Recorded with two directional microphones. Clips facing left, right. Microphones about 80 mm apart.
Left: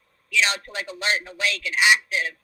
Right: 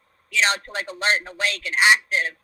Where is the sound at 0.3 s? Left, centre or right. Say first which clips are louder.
Right 2 dB; right.